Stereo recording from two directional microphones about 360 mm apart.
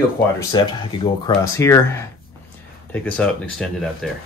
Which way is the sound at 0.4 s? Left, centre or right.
Centre.